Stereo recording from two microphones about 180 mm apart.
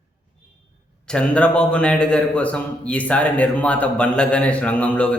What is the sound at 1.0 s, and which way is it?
A man's voice, 5° left (ahead or behind).